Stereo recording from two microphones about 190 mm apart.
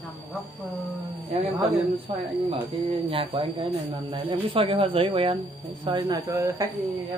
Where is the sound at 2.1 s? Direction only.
30° right (ahead or behind); by 7.0 s 10° right (ahead or behind).